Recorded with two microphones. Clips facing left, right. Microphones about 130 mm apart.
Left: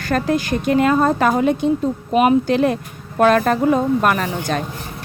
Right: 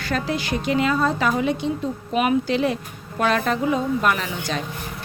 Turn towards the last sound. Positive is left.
turn(degrees=50)  # may be behind; listen again after turning